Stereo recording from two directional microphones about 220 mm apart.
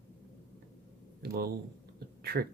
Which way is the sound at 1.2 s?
45° right (ahead or behind).